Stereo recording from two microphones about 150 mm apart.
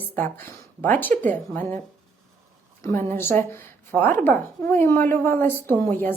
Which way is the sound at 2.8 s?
15° left (ahead or behind).